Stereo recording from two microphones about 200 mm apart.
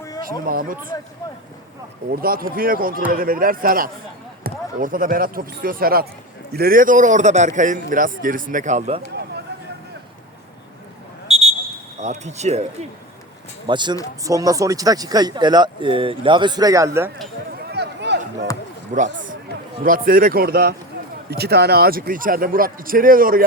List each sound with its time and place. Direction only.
0.4 s a man's voice: 45° right (ahead or behind)
2.0 s a man's voice: 45° right (ahead or behind)
11.3 s a sound: 30° right (ahead or behind)
11.9 s a man's voice: 35° right (ahead or behind)
13.7 s speech: 20° right (ahead or behind)
17.7 s a sound: 55° right (ahead or behind)
18.9 s a man's voice: 40° right (ahead or behind)